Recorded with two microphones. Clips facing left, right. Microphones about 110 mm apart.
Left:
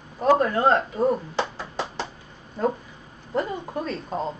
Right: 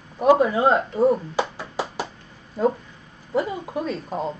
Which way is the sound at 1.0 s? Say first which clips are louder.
Right 3 dB; 5° right (ahead or behind).